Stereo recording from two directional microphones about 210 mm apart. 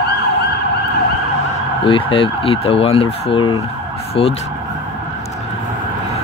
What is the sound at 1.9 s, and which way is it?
Fowl, 25° left (ahead or behind).